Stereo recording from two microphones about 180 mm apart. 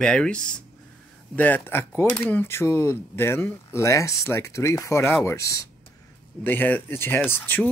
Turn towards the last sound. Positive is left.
turn(degrees=10)  # may be behind; listen again after turning